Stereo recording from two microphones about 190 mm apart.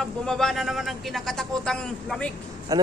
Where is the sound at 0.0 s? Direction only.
5° left (ahead or behind).